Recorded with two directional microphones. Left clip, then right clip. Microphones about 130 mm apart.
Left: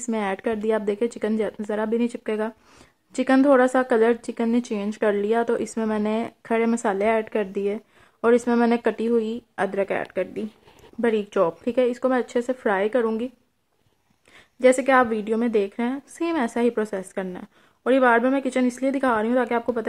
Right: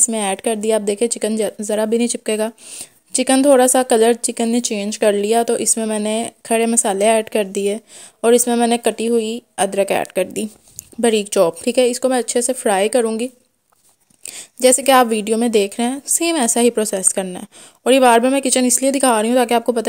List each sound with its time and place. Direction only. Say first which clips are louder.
0.1 s a woman's voice: right 5 dB; 30° right (ahead or behind)
1.7 s a woman's voice: right 8 dB; 40° right (ahead or behind)
3.3 s a woman's voice: right 5 dB; 25° right (ahead or behind)
5.4 s a woman's voice: right 5 dB; 20° right (ahead or behind)
5.8 s a woman's voice: right 5 dB; 30° right (ahead or behind)
7.0 s a woman's voice: right 10 dB; 40° right (ahead or behind); by 9.7 s 20° right (ahead or behind)
9.7 s speech: right 9 dB; 55° right (ahead or behind)
11.0 s a woman's voice: right 7 dB; 45° right (ahead or behind)
11.9 s a woman's voice: right 5 dB; 25° right (ahead or behind)
12.6 s a woman's voice: right 6 dB; 40° right (ahead or behind)
14.3 s a woman's voice: right 4 dB; 40° right (ahead or behind)